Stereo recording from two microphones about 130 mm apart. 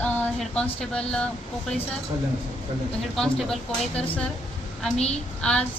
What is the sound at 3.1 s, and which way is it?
Speech, 5° left (ahead or behind).